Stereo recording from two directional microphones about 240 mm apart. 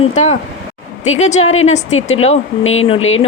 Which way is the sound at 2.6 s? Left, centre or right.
Left.